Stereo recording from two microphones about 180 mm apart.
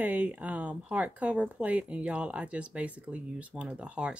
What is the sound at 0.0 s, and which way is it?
Speech, 10° right (ahead or behind).